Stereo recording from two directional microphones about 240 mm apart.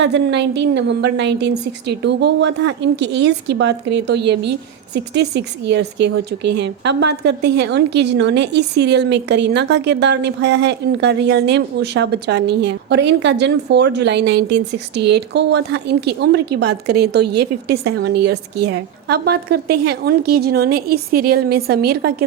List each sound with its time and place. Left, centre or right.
0.0 s a woman's voice: right
6.4 s speech: right
7.0 s a woman's voice: right